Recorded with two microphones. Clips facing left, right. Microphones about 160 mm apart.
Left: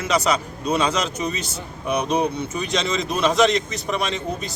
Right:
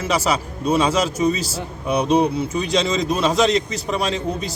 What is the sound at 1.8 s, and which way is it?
Speech, 30° right (ahead or behind).